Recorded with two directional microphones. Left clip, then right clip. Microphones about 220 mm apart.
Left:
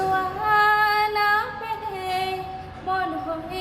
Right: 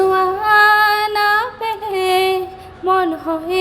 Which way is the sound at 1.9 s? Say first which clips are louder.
Right 12 dB; 40° right (ahead or behind).